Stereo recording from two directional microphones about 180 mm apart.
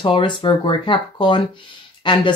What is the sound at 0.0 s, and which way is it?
Speech, 25° left (ahead or behind).